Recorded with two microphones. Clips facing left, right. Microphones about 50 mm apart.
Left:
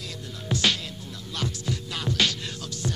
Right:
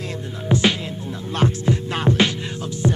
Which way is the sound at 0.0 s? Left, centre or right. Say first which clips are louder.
Right 8 dB; right.